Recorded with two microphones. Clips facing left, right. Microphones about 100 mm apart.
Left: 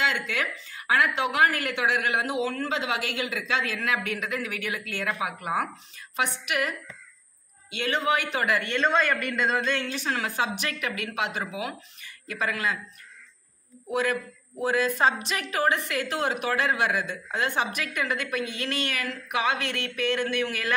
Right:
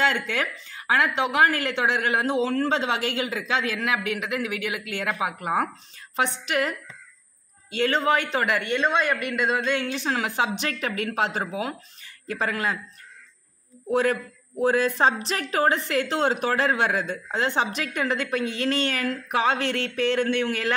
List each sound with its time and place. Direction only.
0.0 s a woman's voice: 30° right (ahead or behind)
8.5 s speech: 15° right (ahead or behind)
8.8 s a woman's voice: 5° right (ahead or behind); by 12.7 s 30° right (ahead or behind)
13.8 s a woman's voice: 30° right (ahead or behind)